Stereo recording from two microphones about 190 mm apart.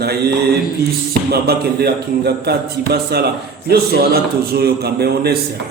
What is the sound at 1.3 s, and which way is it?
A man's voice, 55° right (ahead or behind).